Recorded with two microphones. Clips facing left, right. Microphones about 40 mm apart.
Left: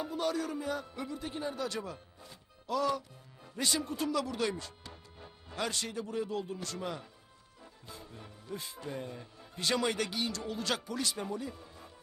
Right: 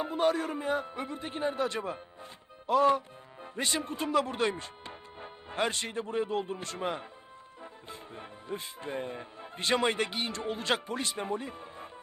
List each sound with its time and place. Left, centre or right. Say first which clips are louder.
0.0 s a man's voice: right 5 dB; right